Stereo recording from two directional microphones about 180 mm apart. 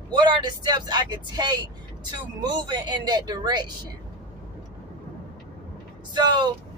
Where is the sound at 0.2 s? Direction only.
25° right (ahead or behind).